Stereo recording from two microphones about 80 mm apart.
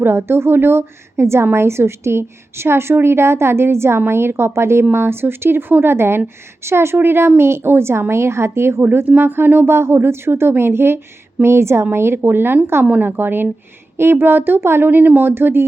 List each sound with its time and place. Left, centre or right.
0.0 s a woman's voice: right